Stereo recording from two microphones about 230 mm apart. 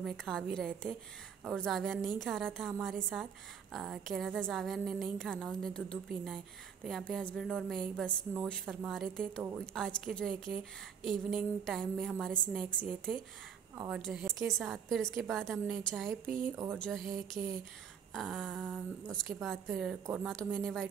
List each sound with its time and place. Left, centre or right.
0.0 s a woman's voice: centre
16.3 s speech: right
16.7 s a woman's voice: centre
17.4 s speech: centre
18.1 s a woman's voice: centre